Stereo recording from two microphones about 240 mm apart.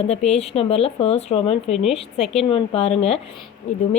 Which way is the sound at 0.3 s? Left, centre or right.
Left.